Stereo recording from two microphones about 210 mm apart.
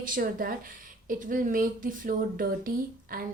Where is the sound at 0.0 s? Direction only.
40° right (ahead or behind).